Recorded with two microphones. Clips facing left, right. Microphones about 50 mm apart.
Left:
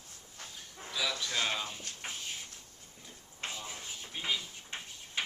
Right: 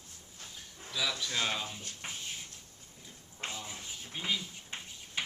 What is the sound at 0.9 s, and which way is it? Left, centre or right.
Speech, centre.